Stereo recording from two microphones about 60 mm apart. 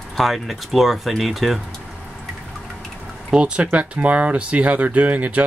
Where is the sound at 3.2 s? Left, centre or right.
Centre.